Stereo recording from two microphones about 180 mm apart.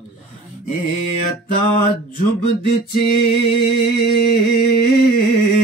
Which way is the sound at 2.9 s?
60° left (ahead or behind).